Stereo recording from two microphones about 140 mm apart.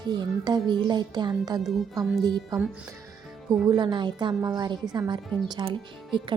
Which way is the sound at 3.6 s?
35° right (ahead or behind).